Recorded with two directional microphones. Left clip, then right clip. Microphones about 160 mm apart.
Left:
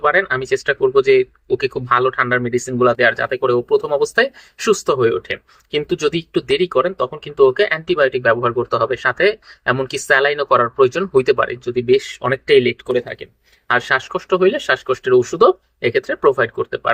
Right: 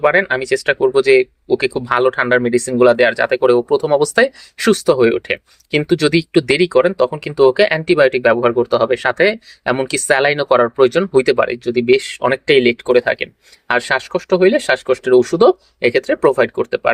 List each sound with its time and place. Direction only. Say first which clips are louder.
0.1 s speech: right 2 dB; 45° right (ahead or behind)